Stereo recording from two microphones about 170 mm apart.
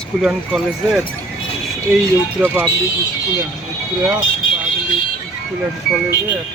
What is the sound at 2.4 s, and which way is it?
Speech, 10° right (ahead or behind).